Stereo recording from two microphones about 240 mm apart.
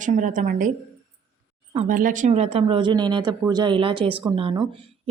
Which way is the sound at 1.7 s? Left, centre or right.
Right.